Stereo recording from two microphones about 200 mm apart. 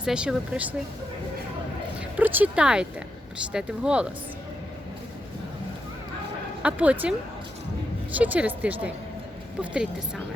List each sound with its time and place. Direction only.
0.0 s speech: 5° right (ahead or behind)
2.1 s speech: 10° right (ahead or behind)
6.6 s speech: 5° right (ahead or behind)
8.1 s speech: 10° right (ahead or behind)